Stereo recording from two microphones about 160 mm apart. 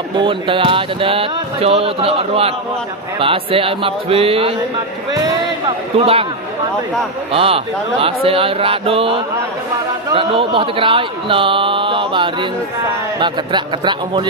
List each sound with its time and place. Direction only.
0.2 s speech: 35° right (ahead or behind)
5.9 s speech: 40° right (ahead or behind)
7.3 s a man's voice: 35° right (ahead or behind)